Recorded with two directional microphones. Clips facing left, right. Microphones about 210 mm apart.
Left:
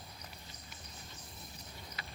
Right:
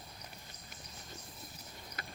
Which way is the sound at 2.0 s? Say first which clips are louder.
Right 4 dB; 50° right (ahead or behind).